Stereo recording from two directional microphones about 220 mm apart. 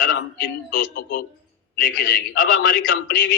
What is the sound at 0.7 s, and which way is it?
A man's voice, 50° left (ahead or behind).